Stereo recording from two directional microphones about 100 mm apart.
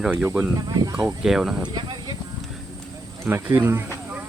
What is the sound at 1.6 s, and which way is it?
Speech, 45° right (ahead or behind).